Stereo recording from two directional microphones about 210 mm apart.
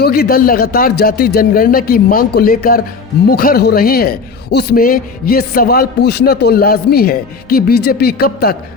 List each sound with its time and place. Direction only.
0.0 s a man's voice: 45° left (ahead or behind)